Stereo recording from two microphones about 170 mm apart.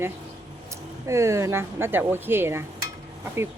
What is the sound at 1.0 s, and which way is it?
Speech, 15° right (ahead or behind).